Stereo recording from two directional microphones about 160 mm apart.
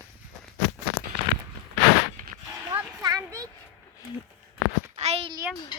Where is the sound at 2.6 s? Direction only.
25° right (ahead or behind).